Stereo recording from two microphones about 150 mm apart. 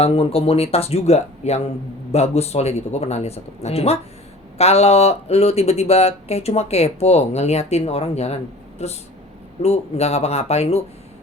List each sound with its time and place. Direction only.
0.0 s speech: 40° left (ahead or behind)